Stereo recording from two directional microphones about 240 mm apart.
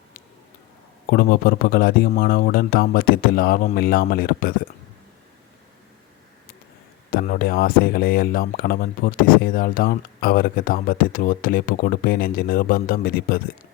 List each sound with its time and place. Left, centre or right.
1.1 s speech: left
7.1 s speech: left